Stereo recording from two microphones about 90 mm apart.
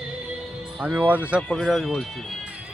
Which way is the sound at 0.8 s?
20° right (ahead or behind).